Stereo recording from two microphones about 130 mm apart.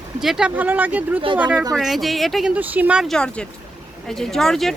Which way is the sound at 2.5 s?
10° right (ahead or behind).